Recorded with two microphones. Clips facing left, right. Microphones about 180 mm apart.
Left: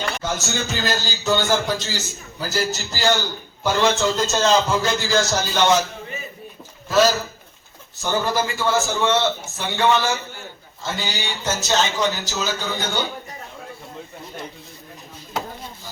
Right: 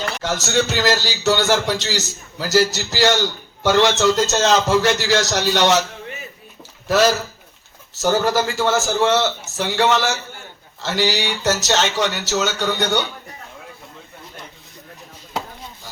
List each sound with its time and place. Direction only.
0.2 s a man's voice: 75° right (ahead or behind)
7.9 s a man's voice: 80° right